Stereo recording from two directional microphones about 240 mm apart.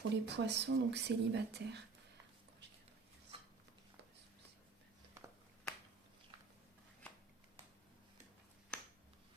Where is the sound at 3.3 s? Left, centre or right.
Right.